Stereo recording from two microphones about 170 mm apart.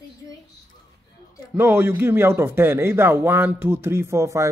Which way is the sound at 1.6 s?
15° right (ahead or behind).